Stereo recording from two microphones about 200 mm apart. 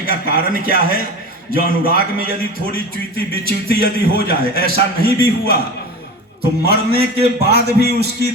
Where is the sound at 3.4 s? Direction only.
50° right (ahead or behind).